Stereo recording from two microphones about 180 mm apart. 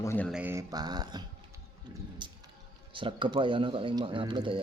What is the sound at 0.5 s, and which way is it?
Speech, 20° right (ahead or behind).